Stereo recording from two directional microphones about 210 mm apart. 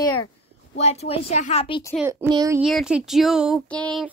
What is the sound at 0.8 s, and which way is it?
A woman's voice, 30° left (ahead or behind).